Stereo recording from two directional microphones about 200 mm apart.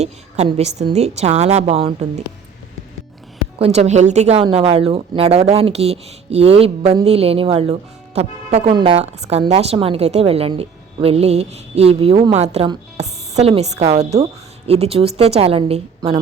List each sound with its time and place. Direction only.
0.0 s speech: 30° right (ahead or behind)
3.6 s speech: 35° right (ahead or behind)